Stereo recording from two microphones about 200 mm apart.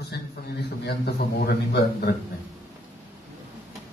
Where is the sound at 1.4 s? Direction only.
55° left (ahead or behind).